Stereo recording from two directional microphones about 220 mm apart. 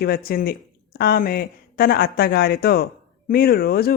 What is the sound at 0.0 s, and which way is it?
Speech, 45° left (ahead or behind).